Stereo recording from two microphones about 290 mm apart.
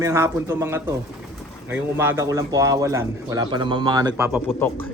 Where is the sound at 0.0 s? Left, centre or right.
Centre.